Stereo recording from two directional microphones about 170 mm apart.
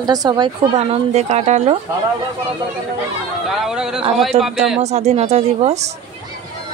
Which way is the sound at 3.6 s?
5° right (ahead or behind).